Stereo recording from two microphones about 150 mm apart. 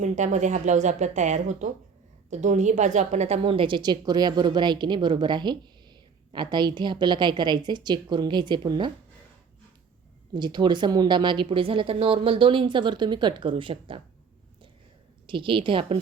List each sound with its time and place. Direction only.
0.0 s a woman's voice: 55° right (ahead or behind); by 8.9 s 30° right (ahead or behind)
10.3 s a woman's voice: 30° right (ahead or behind)
15.3 s a woman's voice: 35° right (ahead or behind)